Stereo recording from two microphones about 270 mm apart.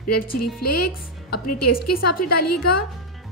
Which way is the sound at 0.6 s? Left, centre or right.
Left.